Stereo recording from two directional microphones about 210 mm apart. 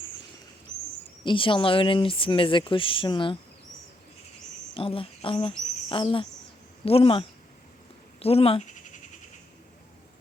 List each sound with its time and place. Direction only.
1.2 s speech: 25° left (ahead or behind)
4.7 s speech: 25° left (ahead or behind)